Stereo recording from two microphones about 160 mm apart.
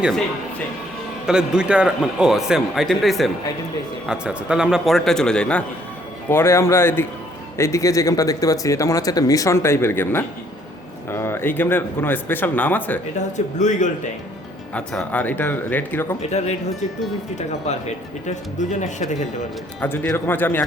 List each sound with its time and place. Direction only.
1.3 s a man's voice: 5° right (ahead or behind); by 13.0 s 10° left (ahead or behind)
13.3 s speech: 50° left (ahead or behind)
14.7 s speech: 5° left (ahead or behind)
16.2 s speech: 45° left (ahead or behind)
19.8 s speech: 10° left (ahead or behind)